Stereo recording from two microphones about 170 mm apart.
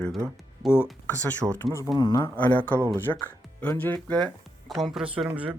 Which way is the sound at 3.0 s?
10° left (ahead or behind).